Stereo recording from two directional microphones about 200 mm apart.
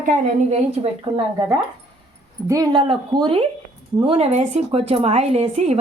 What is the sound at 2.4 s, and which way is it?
A woman's voice, 15° right (ahead or behind).